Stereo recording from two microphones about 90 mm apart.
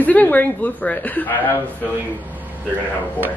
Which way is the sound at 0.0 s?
15° left (ahead or behind).